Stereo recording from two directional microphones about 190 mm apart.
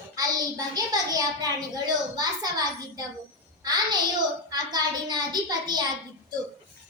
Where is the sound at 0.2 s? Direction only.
20° right (ahead or behind).